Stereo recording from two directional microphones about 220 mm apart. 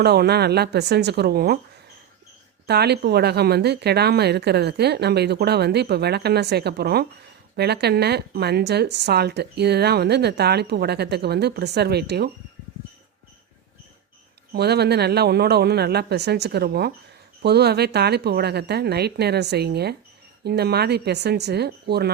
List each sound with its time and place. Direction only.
0.0 s speech: 45° right (ahead or behind)
2.6 s speech: 50° right (ahead or behind)
14.5 s speech: 45° right (ahead or behind)